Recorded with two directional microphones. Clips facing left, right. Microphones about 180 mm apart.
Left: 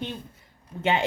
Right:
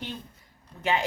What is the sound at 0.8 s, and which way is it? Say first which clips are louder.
Speech: left 3 dB; 25° left (ahead or behind).